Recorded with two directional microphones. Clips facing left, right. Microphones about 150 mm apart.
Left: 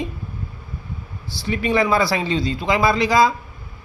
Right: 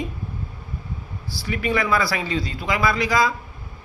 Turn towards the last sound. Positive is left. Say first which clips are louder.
# left 4 dB
turn(degrees=25)  # may be behind; listen again after turning